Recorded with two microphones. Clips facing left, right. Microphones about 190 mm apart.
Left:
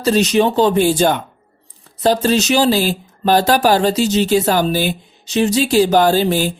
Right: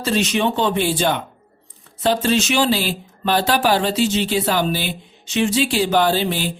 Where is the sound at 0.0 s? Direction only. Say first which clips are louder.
Left 5 dB; 40° left (ahead or behind).